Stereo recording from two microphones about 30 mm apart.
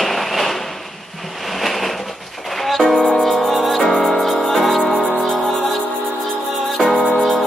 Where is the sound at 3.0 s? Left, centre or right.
Centre.